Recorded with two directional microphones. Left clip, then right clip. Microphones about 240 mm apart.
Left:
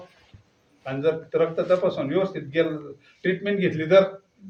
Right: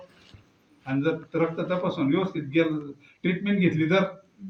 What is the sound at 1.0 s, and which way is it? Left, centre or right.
A man's voice, left.